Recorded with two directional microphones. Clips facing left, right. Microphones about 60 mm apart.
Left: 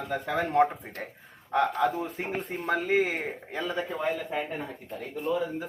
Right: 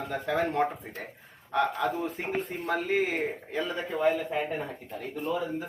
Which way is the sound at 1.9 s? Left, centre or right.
Centre.